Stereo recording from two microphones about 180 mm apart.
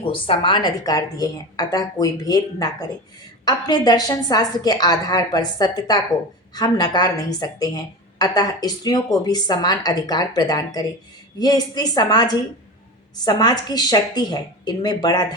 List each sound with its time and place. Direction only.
0.0 s a woman's voice: 30° left (ahead or behind)